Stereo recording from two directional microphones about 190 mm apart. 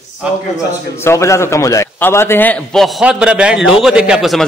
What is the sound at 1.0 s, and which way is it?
A man's voice, 15° left (ahead or behind).